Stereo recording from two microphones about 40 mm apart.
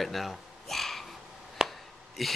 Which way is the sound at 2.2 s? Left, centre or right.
Centre.